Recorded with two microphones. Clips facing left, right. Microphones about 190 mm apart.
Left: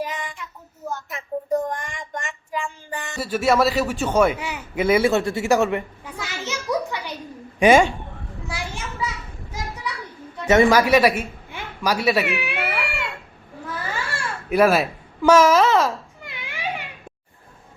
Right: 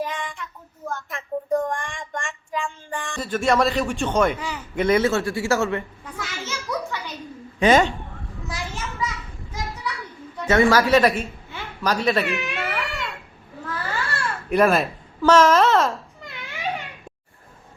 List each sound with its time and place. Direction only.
0.1 s child singing: 10° left (ahead or behind)
0.9 s speech: 5° left (ahead or behind)
5.2 s a child's voice: 20° left (ahead or behind)
8.4 s a sound: 10° left (ahead or behind)
10.5 s a woman's voice: 15° left (ahead or behind)
13.7 s babbling: 10° left (ahead or behind)
15.2 s a child's voice: 10° left (ahead or behind)
16.3 s a sound: 10° left (ahead or behind)